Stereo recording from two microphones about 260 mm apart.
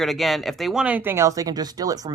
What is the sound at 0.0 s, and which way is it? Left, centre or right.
Speech, centre.